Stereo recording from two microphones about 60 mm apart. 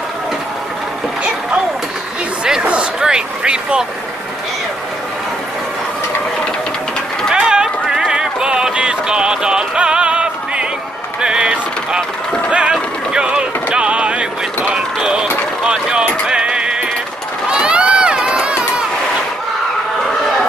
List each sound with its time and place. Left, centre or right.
2.4 s speech: centre
7.3 s music: centre
11.1 s a sound: centre
12.4 s music: centre
12.7 s vehicle: centre
17.5 s run: centre